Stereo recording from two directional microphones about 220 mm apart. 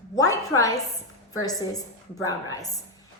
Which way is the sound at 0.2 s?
15° left (ahead or behind).